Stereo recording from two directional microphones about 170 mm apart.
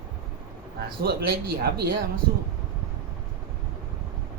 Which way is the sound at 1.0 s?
70° right (ahead or behind).